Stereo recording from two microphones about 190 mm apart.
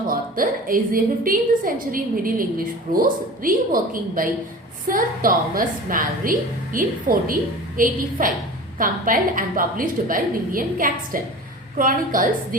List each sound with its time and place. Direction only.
0.1 s a woman's voice: 45° right (ahead or behind)